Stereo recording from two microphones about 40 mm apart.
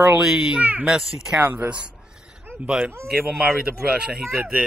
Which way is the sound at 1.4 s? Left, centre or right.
Right.